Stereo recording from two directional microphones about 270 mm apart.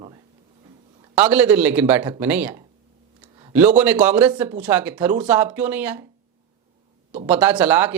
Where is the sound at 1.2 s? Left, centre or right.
Centre.